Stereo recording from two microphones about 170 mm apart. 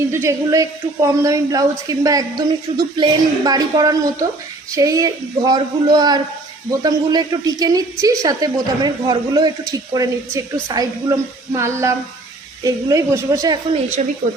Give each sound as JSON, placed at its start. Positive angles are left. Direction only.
{"t": 0.1, "sound": "a woman's voice", "side_deg": -15}
{"t": 14.0, "sound": "speech", "side_deg": -45}